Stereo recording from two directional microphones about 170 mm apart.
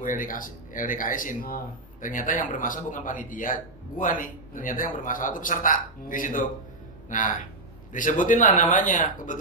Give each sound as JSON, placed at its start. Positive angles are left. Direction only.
{"t": 0.0, "sound": "speech", "side_deg": 50}